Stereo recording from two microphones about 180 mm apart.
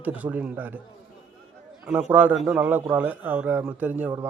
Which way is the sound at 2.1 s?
10° right (ahead or behind).